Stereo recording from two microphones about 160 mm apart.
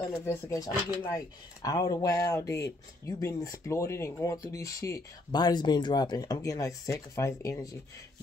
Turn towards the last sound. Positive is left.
turn(degrees=20)  # may be behind; listen again after turning